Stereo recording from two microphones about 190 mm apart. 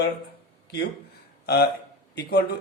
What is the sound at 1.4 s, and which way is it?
Speech, 55° left (ahead or behind).